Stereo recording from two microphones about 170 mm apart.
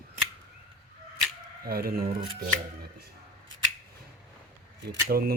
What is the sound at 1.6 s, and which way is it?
Speech, 65° right (ahead or behind).